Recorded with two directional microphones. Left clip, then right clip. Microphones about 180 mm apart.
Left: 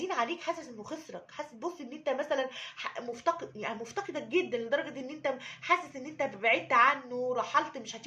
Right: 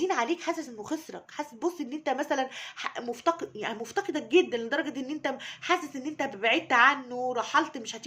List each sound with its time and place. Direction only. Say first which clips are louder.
0.0 s a woman's voice: right 4 dB; 50° right (ahead or behind)